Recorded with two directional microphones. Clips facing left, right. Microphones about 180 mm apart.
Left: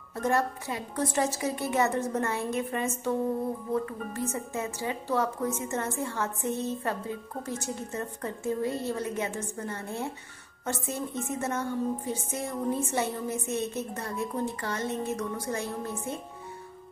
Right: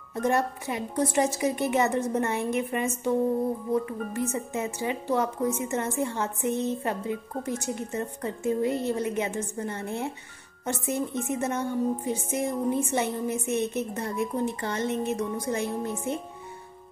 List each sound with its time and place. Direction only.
0.1 s a woman's voice: 20° right (ahead or behind)